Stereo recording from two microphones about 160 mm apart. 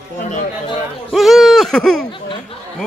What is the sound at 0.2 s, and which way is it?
Speech, 50° left (ahead or behind).